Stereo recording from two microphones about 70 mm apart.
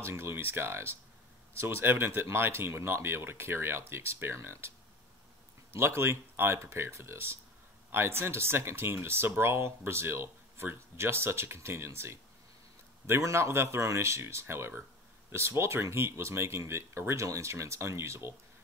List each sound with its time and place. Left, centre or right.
0.0 s speech: right